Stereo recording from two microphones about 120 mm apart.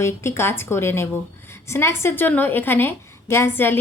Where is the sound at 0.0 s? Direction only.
20° left (ahead or behind).